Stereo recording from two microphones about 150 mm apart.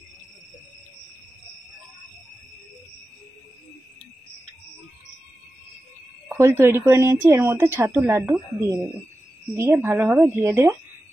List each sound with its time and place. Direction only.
6.2 s speech: 15° right (ahead or behind)